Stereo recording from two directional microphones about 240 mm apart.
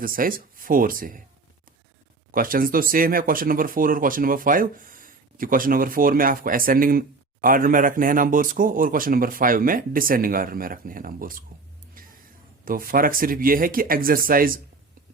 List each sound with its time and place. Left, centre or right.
0.0 s speech: right
2.3 s speech: right
12.0 s music: right
12.6 s speech: right